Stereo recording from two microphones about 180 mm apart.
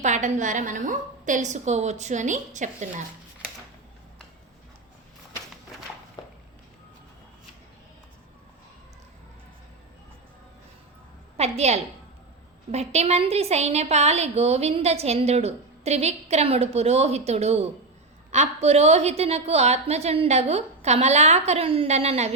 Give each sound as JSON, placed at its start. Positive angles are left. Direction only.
{"t": 0.0, "sound": "a woman's voice", "side_deg": -40}
{"t": 6.2, "sound": "a sound", "side_deg": 25}
{"t": 11.3, "sound": "a woman's voice", "side_deg": -35}